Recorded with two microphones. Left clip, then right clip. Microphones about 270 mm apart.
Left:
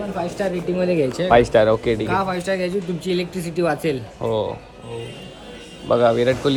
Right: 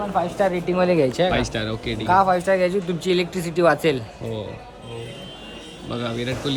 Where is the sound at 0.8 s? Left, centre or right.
Centre.